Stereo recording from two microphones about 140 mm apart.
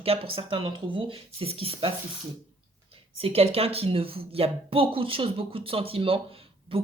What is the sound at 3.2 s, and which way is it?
Speech, 45° right (ahead or behind).